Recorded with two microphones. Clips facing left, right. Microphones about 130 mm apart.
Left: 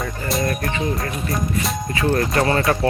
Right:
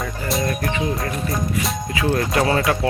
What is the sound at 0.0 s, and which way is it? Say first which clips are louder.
Music: even; centre (ahead or behind).